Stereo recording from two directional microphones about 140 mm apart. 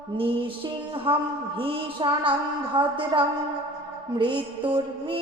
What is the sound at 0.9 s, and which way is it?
A man's voice, 40° right (ahead or behind).